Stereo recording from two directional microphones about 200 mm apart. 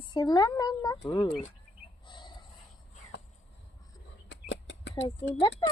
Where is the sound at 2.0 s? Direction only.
25° left (ahead or behind).